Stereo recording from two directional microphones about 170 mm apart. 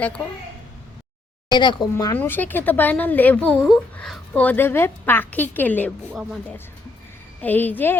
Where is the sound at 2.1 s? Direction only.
10° left (ahead or behind).